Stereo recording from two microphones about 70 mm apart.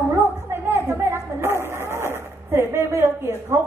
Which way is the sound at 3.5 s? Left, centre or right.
Right.